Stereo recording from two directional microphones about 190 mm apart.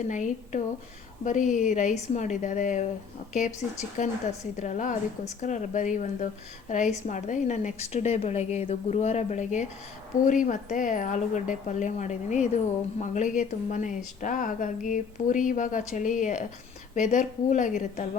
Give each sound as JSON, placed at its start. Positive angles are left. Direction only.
{"t": 0.1, "sound": "speech", "side_deg": 40}